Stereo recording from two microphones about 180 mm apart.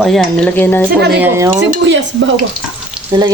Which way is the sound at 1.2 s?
15° right (ahead or behind).